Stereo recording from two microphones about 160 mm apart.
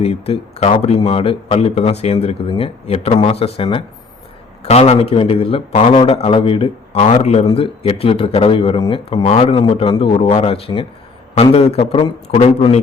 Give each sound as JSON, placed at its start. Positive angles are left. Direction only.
{"t": 0.0, "sound": "a man's voice", "side_deg": 40}